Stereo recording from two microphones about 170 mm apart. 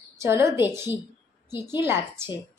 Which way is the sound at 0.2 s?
15° right (ahead or behind).